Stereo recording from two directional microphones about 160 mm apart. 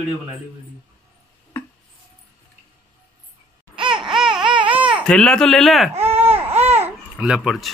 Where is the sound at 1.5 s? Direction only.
10° left (ahead or behind).